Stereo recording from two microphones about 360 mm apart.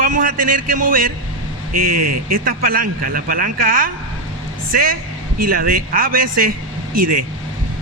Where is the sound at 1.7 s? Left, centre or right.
Right.